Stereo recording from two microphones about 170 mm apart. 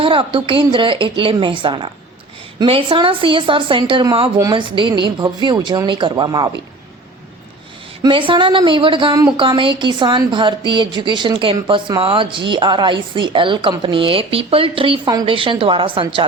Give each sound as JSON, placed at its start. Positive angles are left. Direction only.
{"t": 0.0, "sound": "a woman's voice", "side_deg": -30}
{"t": 8.0, "sound": "a woman's voice", "side_deg": -30}